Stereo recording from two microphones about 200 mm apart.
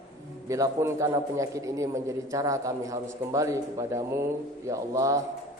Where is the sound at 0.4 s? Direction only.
15° right (ahead or behind).